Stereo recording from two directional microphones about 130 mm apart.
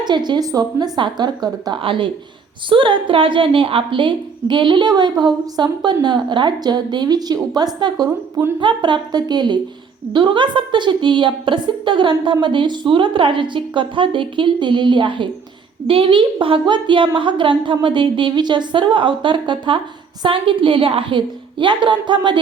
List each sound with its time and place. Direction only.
0.0 s a woman's voice: 35° right (ahead or behind)
1.8 s a woman's voice: 40° right (ahead or behind)